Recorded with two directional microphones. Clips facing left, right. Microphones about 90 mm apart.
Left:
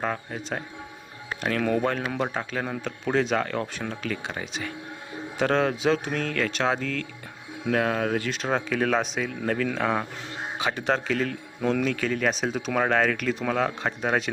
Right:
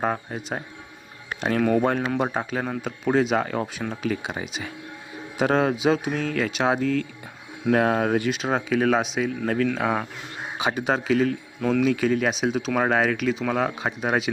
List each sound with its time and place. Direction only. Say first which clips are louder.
0.0 s a man's voice: right 3 dB; 20° right (ahead or behind)
7.7 s speech: right 4 dB; 30° right (ahead or behind)
8.2 s a man's voice: right 2 dB; 5° right (ahead or behind)
10.6 s a man's voice: right 2 dB; 15° right (ahead or behind)